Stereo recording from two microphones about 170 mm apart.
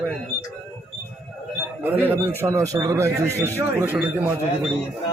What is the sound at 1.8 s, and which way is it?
A man's voice, 10° right (ahead or behind).